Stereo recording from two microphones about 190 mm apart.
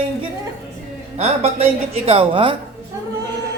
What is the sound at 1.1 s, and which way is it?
A woman's voice, 35° right (ahead or behind).